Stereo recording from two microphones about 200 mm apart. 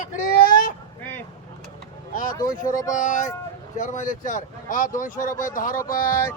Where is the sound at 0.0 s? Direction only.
45° left (ahead or behind).